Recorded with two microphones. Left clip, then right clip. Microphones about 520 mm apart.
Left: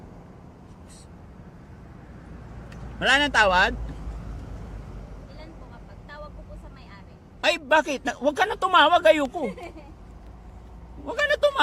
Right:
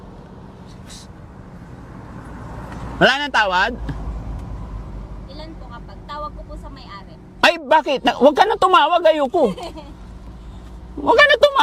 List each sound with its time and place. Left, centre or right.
3.0 s a man's voice: right
7.4 s speech: right
11.0 s a man's voice: right